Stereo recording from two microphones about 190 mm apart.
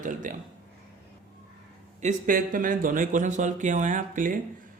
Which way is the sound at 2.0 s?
40° right (ahead or behind).